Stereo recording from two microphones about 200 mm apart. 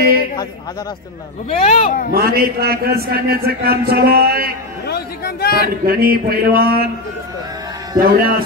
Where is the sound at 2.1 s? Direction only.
50° right (ahead or behind).